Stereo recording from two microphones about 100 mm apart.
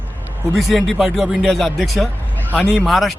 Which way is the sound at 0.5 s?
Centre (ahead or behind).